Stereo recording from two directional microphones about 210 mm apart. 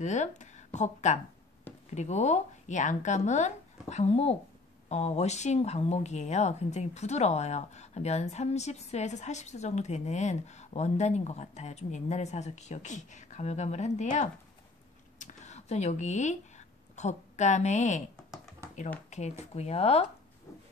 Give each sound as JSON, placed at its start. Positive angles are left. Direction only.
{"t": 0.0, "sound": "speech", "side_deg": 35}
{"t": 18.6, "sound": "a sound", "side_deg": -15}
{"t": 19.0, "sound": "speech", "side_deg": 35}